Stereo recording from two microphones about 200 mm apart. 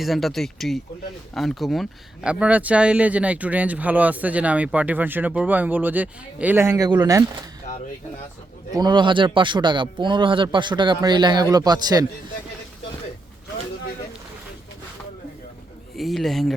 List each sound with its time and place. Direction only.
0.0 s speech: centre (ahead or behind); by 7.3 s 20° right (ahead or behind)
8.7 s speech: 20° right (ahead or behind)
16.0 s speech: centre (ahead or behind)